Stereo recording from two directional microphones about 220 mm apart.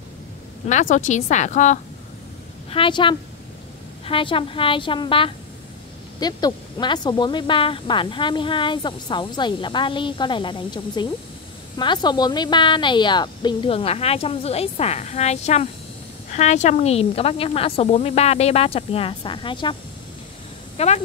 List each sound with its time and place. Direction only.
0.7 s a woman's voice: 35° left (ahead or behind)
2.7 s speech: 25° left (ahead or behind)